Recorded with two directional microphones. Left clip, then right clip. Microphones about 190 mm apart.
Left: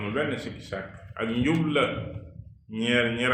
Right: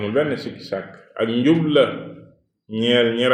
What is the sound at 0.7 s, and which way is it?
Speech, 40° right (ahead or behind).